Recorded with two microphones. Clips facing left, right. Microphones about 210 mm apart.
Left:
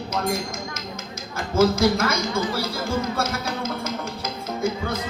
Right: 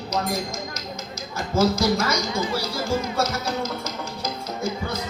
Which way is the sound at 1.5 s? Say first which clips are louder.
Left 2 dB; 55° left (ahead or behind).